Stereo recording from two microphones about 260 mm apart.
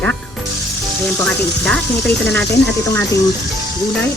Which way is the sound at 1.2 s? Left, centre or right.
Centre.